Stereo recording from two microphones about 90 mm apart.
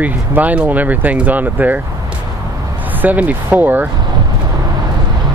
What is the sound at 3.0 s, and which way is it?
Speech, 15° right (ahead or behind).